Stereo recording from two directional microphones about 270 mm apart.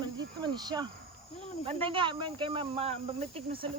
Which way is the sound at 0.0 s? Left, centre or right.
Centre.